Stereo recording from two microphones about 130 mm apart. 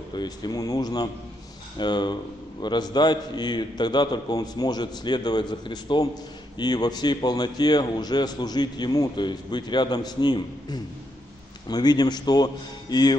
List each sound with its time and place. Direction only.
0.1 s a man's voice: 35° left (ahead or behind)